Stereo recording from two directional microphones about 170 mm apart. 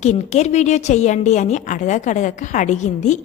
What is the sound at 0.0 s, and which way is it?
A woman's voice, 40° left (ahead or behind).